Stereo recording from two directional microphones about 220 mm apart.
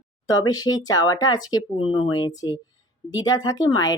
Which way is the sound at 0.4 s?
15° left (ahead or behind).